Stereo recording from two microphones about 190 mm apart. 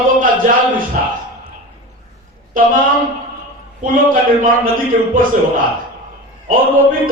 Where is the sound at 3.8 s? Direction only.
45° right (ahead or behind).